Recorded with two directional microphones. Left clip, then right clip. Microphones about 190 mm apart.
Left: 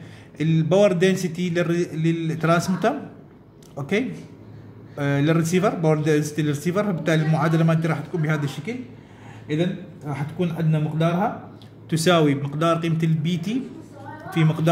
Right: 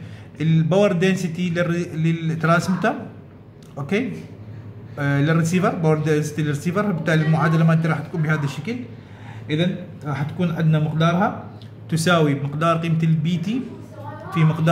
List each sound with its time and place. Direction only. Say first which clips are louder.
0.4 s speech: left 1 dB; 25° left (ahead or behind)
11.9 s speech: even; 30° left (ahead or behind)